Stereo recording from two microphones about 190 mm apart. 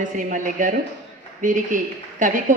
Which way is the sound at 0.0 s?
45° right (ahead or behind).